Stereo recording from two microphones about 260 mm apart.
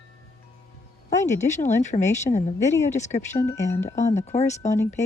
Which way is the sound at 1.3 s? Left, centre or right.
Left.